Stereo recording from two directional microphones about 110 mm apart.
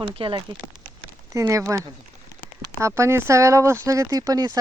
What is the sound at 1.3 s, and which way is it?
Speech, 30° right (ahead or behind).